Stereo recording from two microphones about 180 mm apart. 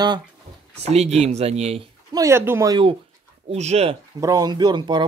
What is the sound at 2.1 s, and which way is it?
Speech, 15° right (ahead or behind).